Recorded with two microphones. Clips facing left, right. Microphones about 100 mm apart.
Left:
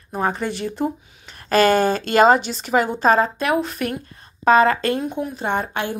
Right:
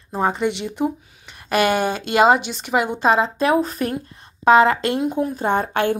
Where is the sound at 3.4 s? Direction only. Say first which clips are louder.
Right 3 dB; 35° right (ahead or behind).